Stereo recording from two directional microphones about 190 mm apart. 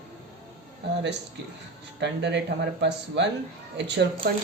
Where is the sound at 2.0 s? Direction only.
65° right (ahead or behind).